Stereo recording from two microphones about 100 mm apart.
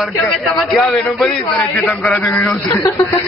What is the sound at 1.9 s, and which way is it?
Speech, 15° left (ahead or behind).